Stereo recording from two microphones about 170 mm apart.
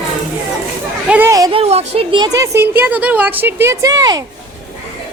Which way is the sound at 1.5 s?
40° right (ahead or behind).